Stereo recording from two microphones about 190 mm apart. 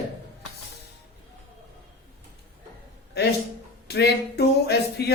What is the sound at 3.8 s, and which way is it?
Speech, 60° left (ahead or behind).